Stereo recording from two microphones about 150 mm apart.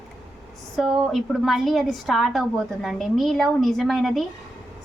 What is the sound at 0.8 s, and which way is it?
A woman's voice, centre (ahead or behind).